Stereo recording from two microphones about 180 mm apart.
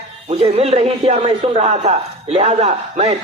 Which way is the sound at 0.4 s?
35° right (ahead or behind).